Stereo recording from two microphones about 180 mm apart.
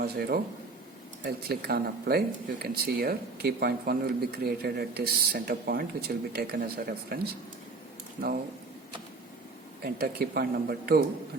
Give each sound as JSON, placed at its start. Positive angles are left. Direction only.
{"t": 0.0, "sound": "speech", "side_deg": -60}
{"t": 9.8, "sound": "speech", "side_deg": -60}